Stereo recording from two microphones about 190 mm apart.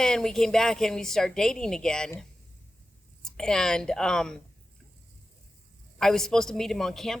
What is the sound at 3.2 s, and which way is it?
A woman's voice, 5° left (ahead or behind).